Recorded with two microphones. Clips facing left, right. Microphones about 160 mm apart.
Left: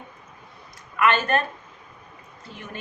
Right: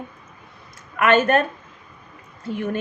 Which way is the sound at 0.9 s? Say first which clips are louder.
Right 5 dB; 50° right (ahead or behind).